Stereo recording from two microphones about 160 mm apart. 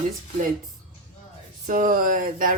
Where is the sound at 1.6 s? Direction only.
55° right (ahead or behind).